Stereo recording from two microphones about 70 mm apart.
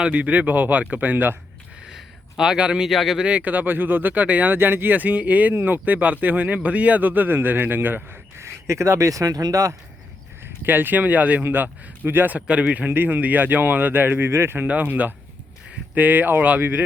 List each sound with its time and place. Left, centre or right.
0.0 s speech: centre
1.8 s speech: centre
3.2 s speech: right
8.4 s speech: right
10.4 s speech: right
12.5 s speech: centre; by 14.7 s right
14.7 s speech: right